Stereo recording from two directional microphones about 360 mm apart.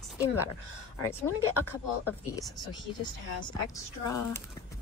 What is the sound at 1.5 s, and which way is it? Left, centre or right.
Speech, left.